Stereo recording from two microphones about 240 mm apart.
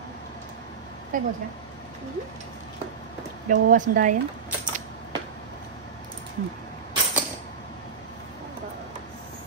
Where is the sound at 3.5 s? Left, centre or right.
Right.